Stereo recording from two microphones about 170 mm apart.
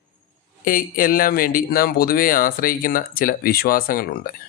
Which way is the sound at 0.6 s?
55° left (ahead or behind).